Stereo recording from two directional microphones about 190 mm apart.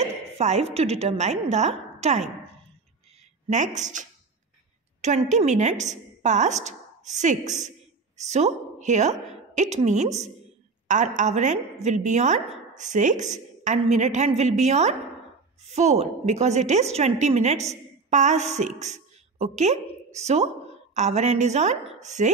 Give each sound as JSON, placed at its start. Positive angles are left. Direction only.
{"t": 0.0, "sound": "a woman's voice", "side_deg": -35}
{"t": 3.4, "sound": "a woman's voice", "side_deg": -40}